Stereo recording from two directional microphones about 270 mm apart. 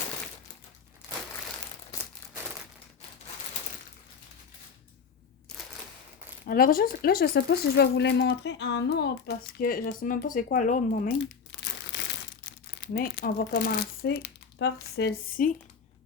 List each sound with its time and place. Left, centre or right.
1.9 s crumpling: centre
6.4 s speech: left